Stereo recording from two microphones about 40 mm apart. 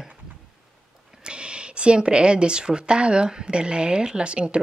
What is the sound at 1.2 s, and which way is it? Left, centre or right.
Speech, right.